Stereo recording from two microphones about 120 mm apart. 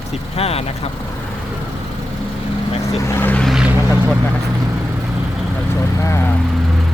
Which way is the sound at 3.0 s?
20° left (ahead or behind).